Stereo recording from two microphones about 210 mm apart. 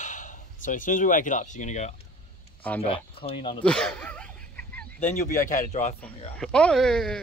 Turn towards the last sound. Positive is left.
turn(degrees=5)  # may be behind; listen again after turning